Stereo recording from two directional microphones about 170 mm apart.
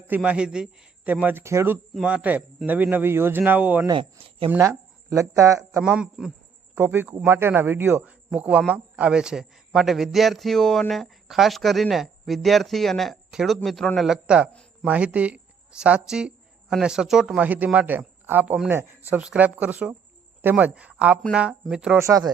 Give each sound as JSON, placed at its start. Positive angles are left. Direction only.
{"t": 0.1, "sound": "a man's voice", "side_deg": -5}
{"t": 3.8, "sound": "speech", "side_deg": -30}
{"t": 4.4, "sound": "speech", "side_deg": -15}
{"t": 5.8, "sound": "a man's voice", "side_deg": -5}
{"t": 14.5, "sound": "a sound", "side_deg": 5}
{"t": 14.8, "sound": "a man's voice", "side_deg": -10}
{"t": 21.9, "sound": "a man's voice", "side_deg": -15}